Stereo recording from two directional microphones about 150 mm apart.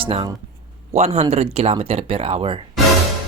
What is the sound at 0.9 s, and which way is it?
Speech, 45° right (ahead or behind).